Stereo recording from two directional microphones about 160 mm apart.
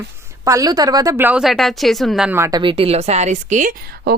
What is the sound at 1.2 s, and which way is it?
Speech, 5° right (ahead or behind).